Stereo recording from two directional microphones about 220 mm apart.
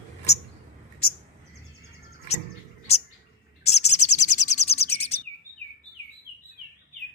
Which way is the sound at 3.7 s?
30° left (ahead or behind).